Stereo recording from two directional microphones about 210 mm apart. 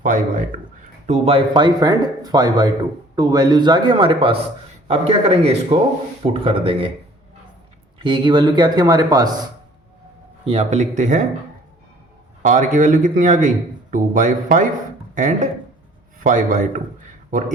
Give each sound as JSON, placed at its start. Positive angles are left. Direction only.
{"t": 0.0, "sound": "speech", "side_deg": -40}
{"t": 7.9, "sound": "speech", "side_deg": -25}
{"t": 10.4, "sound": "speech", "side_deg": -30}
{"t": 12.4, "sound": "speech", "side_deg": -40}